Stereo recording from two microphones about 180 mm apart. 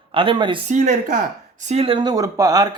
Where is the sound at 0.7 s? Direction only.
45° right (ahead or behind); by 2.7 s 20° right (ahead or behind).